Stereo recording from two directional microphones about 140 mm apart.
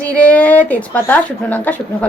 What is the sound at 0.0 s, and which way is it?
A woman's voice, 10° left (ahead or behind).